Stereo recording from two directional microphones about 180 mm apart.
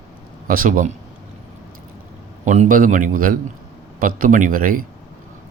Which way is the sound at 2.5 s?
45° right (ahead or behind).